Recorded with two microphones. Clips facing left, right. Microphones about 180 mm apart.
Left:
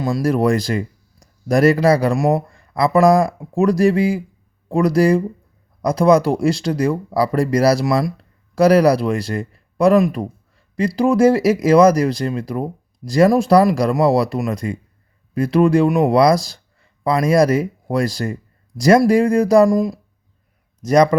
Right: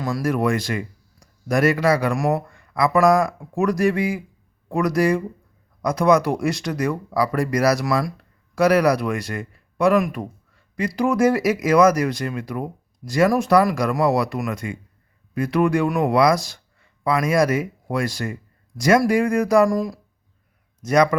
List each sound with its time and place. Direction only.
0.0 s speech: 30° left (ahead or behind)
20.8 s speech: 35° left (ahead or behind)